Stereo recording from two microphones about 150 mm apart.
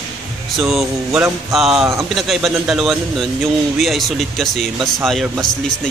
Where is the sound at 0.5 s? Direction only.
Centre (ahead or behind).